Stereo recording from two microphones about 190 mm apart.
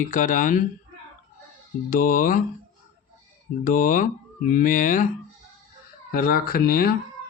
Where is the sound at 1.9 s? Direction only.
45° left (ahead or behind).